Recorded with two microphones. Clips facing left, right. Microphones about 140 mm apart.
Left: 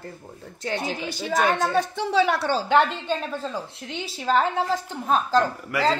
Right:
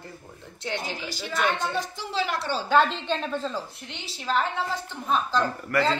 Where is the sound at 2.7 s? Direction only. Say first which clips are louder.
Even; 15° left (ahead or behind).